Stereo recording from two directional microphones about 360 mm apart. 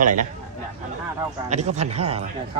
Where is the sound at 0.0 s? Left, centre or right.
Right.